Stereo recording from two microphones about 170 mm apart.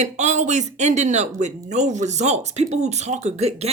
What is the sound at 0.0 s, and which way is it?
Speech, 45° right (ahead or behind).